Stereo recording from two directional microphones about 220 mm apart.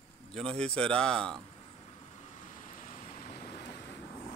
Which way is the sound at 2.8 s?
30° left (ahead or behind).